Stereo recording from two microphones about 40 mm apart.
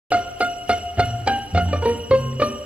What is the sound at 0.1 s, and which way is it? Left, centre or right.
Music, right.